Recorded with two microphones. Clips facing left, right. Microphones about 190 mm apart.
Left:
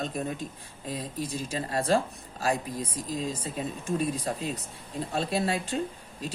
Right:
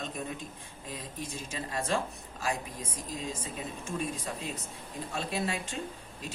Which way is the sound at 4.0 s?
35° left (ahead or behind).